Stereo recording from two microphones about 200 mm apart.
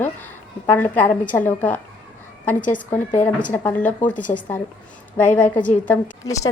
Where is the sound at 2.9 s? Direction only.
10° left (ahead or behind).